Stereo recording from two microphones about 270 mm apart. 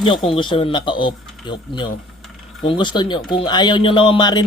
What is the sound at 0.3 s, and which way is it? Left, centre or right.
Speech, centre.